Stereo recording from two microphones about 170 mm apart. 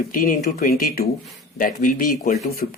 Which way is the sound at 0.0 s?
55° left (ahead or behind).